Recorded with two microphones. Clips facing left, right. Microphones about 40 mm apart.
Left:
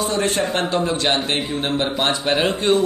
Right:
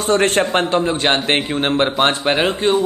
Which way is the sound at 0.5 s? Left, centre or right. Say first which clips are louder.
Right 4 dB; right.